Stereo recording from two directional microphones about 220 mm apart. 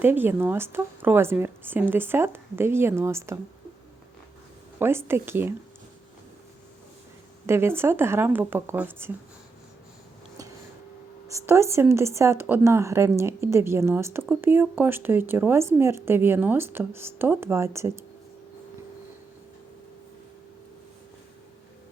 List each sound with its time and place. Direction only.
0.0 s speech: 10° right (ahead or behind)
4.8 s speech: 10° right (ahead or behind)
7.4 s speech: 10° right (ahead or behind)
11.3 s speech: 15° right (ahead or behind)